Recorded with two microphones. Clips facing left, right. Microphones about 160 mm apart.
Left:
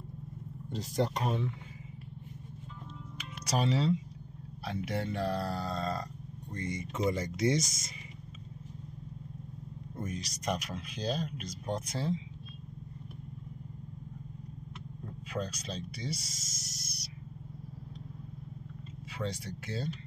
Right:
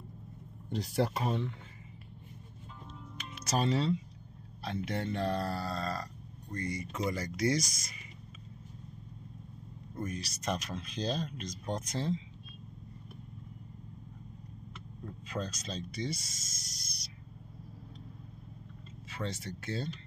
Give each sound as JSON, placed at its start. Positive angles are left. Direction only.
{"t": 0.7, "sound": "speech", "side_deg": -10}
{"t": 3.2, "sound": "music", "side_deg": 10}
{"t": 4.6, "sound": "speech", "side_deg": 10}
{"t": 10.0, "sound": "speech", "side_deg": 20}
{"t": 15.2, "sound": "speech", "side_deg": 10}
{"t": 19.1, "sound": "speech", "side_deg": 15}